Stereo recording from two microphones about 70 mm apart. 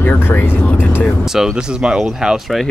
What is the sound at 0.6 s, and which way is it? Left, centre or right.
Speech, left.